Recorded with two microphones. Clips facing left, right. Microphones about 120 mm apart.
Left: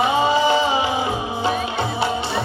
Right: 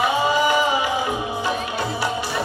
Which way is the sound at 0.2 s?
25° left (ahead or behind).